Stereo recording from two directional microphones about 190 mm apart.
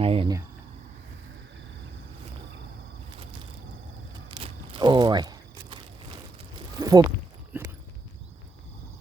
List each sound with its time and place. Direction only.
0.0 s speech: 30° right (ahead or behind)
4.3 s a sound: 25° right (ahead or behind)
7.5 s clip-clop: 10° right (ahead or behind)